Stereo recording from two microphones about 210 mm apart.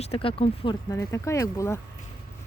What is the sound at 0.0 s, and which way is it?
Speech, 25° left (ahead or behind).